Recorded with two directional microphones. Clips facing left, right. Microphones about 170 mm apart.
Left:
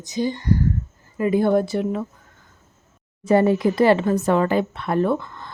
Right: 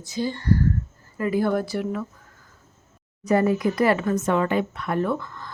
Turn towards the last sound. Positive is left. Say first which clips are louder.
# left 4 dB
turn(degrees=25)  # may be behind; listen again after turning